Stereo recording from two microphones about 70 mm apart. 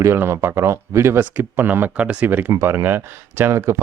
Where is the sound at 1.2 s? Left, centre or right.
Right.